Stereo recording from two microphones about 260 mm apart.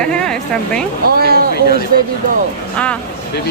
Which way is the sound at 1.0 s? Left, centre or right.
Right.